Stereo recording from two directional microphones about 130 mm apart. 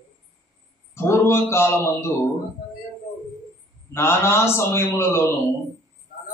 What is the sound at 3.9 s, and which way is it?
A man's voice, 20° left (ahead or behind).